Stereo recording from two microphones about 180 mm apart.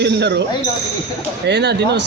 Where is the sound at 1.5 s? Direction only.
70° right (ahead or behind).